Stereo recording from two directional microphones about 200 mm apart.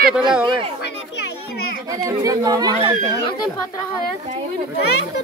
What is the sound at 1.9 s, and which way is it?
Speech, 15° right (ahead or behind).